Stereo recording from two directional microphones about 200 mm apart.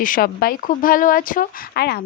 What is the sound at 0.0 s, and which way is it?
A woman's voice, 45° left (ahead or behind).